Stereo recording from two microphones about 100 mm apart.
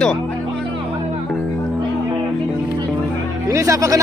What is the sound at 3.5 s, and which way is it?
Speech, 30° right (ahead or behind).